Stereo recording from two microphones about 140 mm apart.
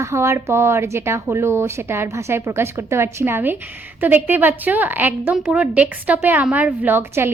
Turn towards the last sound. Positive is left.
turn(degrees=-15)  # may be behind; listen again after turning